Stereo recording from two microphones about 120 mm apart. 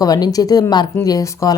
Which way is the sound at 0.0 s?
30° left (ahead or behind).